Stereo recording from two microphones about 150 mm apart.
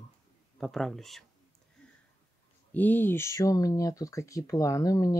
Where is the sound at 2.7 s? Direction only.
10° left (ahead or behind).